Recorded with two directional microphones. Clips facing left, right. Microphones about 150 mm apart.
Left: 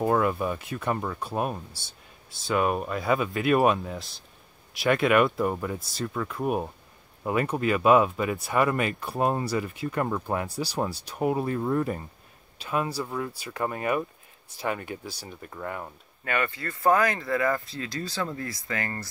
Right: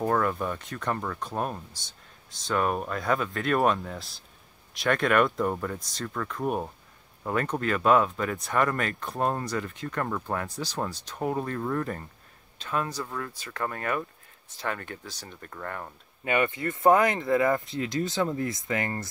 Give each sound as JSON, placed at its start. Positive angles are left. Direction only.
{"t": 0.0, "sound": "speech", "side_deg": 10}
{"t": 16.3, "sound": "speech", "side_deg": -20}